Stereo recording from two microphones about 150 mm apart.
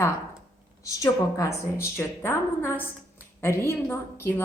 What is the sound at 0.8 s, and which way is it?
A woman's voice, 20° left (ahead or behind).